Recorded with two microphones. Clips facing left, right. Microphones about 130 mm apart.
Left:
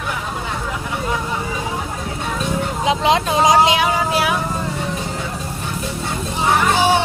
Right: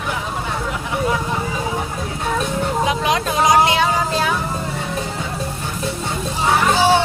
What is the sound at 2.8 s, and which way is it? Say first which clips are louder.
Vehicle: left 6 dB; 25° left (ahead or behind).